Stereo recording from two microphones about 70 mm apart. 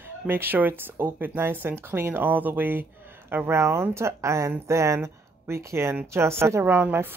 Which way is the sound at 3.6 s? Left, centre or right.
Right.